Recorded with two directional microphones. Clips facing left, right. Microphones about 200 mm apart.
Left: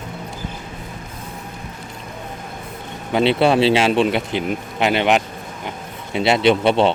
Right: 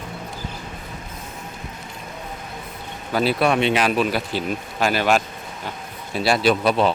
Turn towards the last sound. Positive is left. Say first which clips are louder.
# left 3 dB
turn(degrees=25)  # may be behind; listen again after turning